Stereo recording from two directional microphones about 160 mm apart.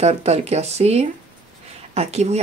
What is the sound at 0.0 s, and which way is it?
Speech, 40° right (ahead or behind).